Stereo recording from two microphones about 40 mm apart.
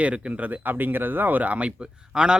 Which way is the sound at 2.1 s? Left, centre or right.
Right.